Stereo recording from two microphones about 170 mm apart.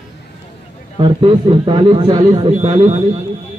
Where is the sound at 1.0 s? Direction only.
30° right (ahead or behind).